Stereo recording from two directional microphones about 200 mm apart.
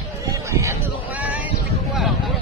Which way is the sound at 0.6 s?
10° right (ahead or behind).